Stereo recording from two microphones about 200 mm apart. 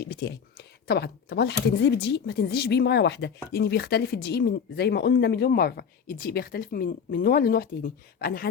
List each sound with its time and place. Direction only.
0.0 s speech: 55° left (ahead or behind)